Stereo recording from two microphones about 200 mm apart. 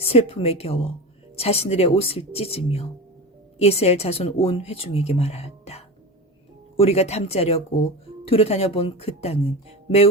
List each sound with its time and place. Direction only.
0.0 s speech: 30° left (ahead or behind)